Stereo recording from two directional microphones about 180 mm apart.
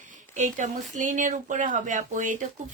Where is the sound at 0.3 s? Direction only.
45° right (ahead or behind).